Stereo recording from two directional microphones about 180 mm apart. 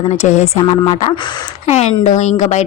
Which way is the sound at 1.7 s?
40° left (ahead or behind).